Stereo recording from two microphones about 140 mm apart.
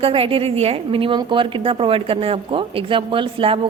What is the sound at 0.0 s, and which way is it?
A woman's voice, 40° right (ahead or behind).